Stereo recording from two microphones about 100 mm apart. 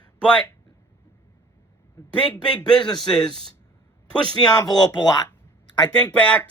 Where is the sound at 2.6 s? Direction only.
45° left (ahead or behind).